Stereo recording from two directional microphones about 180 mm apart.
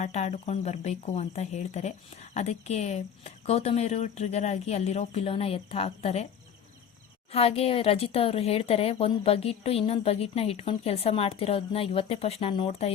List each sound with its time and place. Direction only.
0.0 s speech: 40° left (ahead or behind)
7.3 s speech: 35° left (ahead or behind)